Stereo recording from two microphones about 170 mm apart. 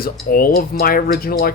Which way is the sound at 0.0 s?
60° left (ahead or behind).